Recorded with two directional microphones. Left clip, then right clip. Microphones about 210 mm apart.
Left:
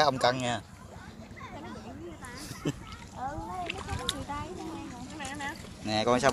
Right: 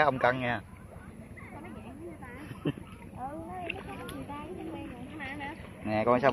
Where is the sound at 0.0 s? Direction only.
25° left (ahead or behind).